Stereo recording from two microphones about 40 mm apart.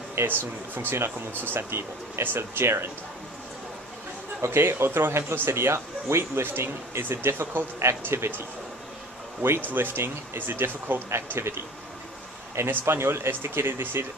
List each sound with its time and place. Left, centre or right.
0.1 s speech: right
4.5 s speech: right
9.7 s speech: right
12.6 s speech: right